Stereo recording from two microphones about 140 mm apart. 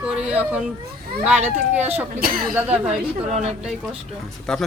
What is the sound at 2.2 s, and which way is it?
Speech, 90° right.